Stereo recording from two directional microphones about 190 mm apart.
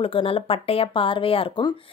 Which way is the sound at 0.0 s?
30° left (ahead or behind).